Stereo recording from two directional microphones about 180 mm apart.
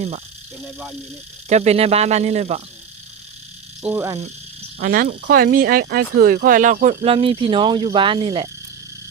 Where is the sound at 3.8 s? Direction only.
10° right (ahead or behind).